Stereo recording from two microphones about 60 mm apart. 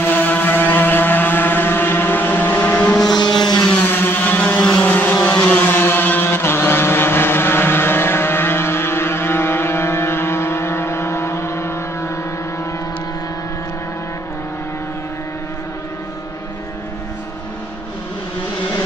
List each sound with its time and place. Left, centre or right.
0.0 s vehicle: left
4.6 s vehicle: centre; by 12.1 s left